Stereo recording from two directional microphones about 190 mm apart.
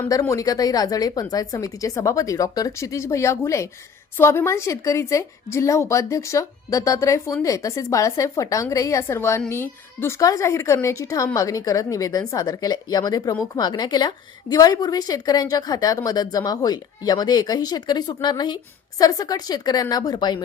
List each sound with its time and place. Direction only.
0.0 s a woman's voice: 15° left (ahead or behind)